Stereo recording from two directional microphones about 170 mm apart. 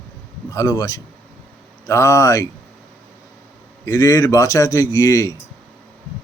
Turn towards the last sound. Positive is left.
turn(degrees=20)  # may be behind; listen again after turning